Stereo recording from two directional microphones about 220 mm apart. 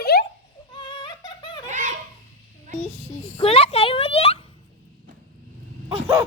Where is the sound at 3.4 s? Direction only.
25° left (ahead or behind).